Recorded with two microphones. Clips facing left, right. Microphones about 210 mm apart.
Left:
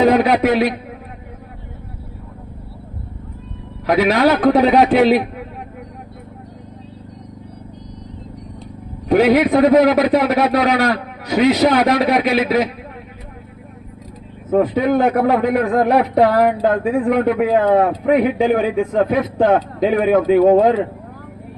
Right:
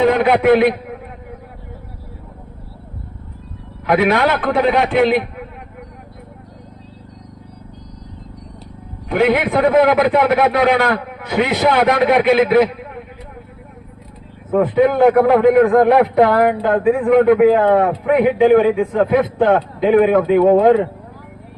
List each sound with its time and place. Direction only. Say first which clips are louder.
0.0 s a man's voice: even; 40° left (ahead or behind)
3.8 s a man's voice: left 1 dB; 40° left (ahead or behind)
9.0 s a man's voice: left 3 dB; 40° left (ahead or behind)
14.5 s a man's voice: right 1 dB; 40° left (ahead or behind)
17.3 s a man's voice: right 4 dB; 60° right (ahead or behind)
17.7 s a man's voice: even; 40° left (ahead or behind)